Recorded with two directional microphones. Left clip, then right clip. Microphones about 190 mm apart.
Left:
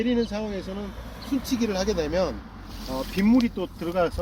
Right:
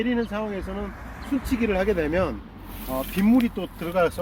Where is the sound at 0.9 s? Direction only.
45° left (ahead or behind).